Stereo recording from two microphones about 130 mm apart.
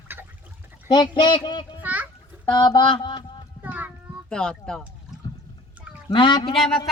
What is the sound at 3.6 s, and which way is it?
Child singing, 15° right (ahead or behind).